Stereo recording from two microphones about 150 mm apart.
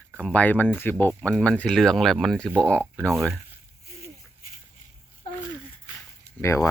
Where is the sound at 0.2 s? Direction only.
5° left (ahead or behind).